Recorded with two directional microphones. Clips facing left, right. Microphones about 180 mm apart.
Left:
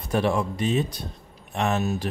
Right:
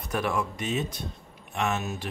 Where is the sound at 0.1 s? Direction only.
30° left (ahead or behind).